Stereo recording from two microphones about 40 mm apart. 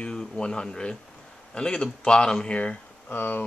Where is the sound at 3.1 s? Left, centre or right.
Left.